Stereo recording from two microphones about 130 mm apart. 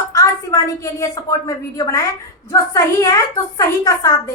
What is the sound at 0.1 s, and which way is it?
A woman's voice, 25° left (ahead or behind).